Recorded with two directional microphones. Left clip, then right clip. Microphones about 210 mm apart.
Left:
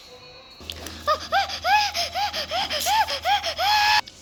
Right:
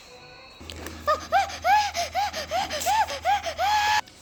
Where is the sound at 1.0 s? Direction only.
10° right (ahead or behind).